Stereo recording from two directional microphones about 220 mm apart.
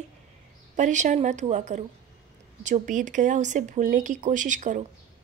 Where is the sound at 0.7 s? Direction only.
35° right (ahead or behind).